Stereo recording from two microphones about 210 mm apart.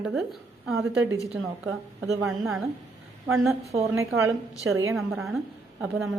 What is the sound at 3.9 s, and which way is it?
Speech, 10° right (ahead or behind).